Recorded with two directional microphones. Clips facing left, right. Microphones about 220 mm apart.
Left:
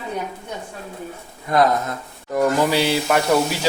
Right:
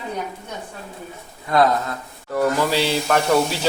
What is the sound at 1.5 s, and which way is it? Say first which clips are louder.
Speech: even; 20° left (ahead or behind).